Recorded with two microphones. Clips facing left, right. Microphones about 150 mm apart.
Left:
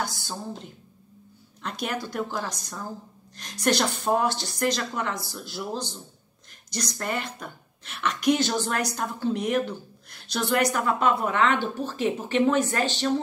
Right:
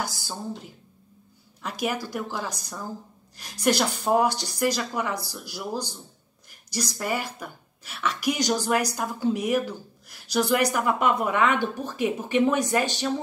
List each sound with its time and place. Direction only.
1.6 s a woman's voice: 10° right (ahead or behind)